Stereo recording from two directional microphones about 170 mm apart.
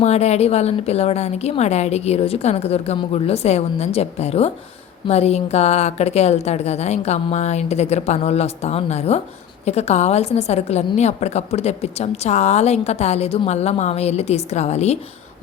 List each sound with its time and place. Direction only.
0.0 s a woman's voice: 40° left (ahead or behind)